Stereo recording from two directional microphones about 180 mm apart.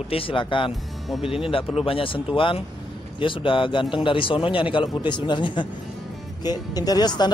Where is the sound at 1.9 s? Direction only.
30° left (ahead or behind).